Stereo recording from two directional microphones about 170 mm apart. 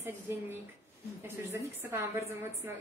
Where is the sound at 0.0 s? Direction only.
10° right (ahead or behind).